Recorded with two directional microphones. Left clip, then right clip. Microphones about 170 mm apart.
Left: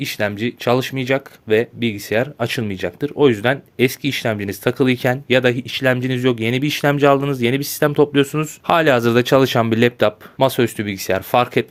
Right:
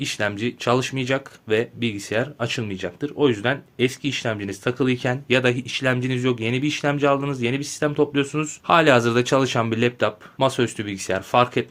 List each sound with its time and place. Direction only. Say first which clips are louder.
0.0 s speech: left 3 dB; 40° left (ahead or behind)